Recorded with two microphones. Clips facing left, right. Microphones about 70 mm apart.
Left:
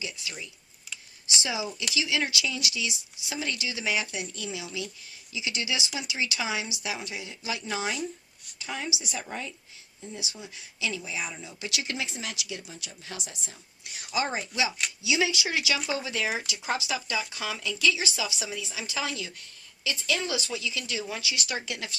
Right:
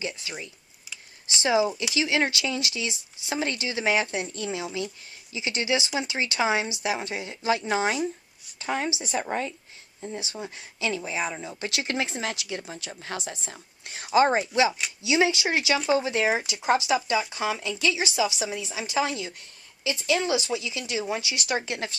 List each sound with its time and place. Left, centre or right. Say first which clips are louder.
0.0 s a woman's voice: right 4 dB; right